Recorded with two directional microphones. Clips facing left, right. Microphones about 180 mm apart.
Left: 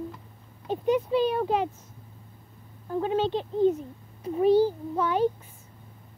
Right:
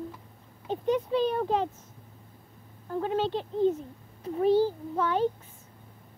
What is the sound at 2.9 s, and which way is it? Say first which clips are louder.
A child's voice: left 2 dB; 15° left (ahead or behind).